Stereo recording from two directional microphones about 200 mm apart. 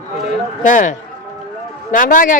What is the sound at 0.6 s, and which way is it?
Speech, 40° left (ahead or behind).